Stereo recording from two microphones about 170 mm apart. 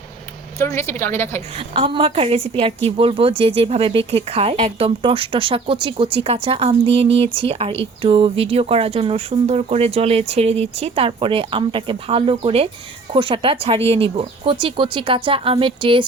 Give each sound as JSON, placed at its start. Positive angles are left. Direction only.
{"t": 0.6, "sound": "a woman's voice", "side_deg": 15}
{"t": 1.5, "sound": "a woman's voice", "side_deg": -35}